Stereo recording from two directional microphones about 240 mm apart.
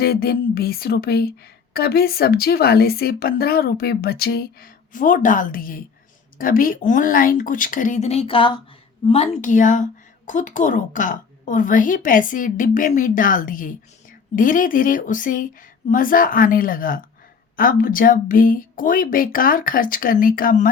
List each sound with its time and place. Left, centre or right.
0.0 s speech: left